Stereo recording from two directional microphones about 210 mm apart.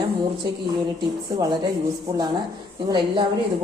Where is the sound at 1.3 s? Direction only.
20° right (ahead or behind).